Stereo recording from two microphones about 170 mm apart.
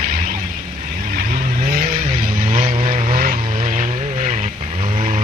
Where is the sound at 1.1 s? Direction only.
55° right (ahead or behind).